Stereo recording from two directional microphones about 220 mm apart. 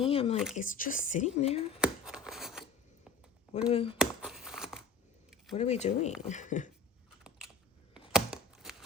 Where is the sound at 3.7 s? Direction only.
25° left (ahead or behind).